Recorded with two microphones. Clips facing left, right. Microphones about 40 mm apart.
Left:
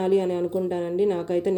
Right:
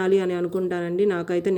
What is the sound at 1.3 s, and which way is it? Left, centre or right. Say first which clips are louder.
Speech: right 1 dB; right.